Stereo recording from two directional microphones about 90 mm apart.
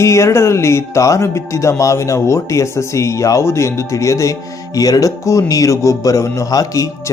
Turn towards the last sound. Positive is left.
turn(degrees=40)  # may be behind; listen again after turning